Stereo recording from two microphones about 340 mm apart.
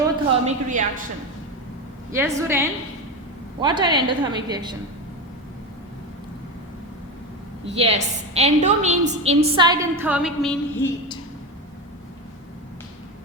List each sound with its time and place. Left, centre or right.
0.0 s speech: right
2.1 s a woman's voice: centre
7.6 s a woman's voice: centre